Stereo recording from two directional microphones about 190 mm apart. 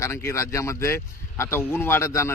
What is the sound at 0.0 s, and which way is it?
Speech, 15° left (ahead or behind).